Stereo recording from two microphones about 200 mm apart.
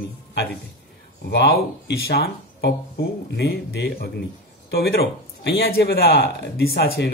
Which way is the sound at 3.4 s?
55° left (ahead or behind).